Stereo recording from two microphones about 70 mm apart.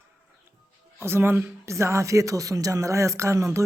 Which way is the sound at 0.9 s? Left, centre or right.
Right.